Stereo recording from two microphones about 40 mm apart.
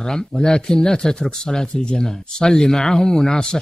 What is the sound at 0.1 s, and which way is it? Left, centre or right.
Speech, centre.